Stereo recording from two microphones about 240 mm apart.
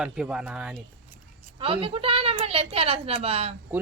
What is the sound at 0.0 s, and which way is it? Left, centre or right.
Speech, centre.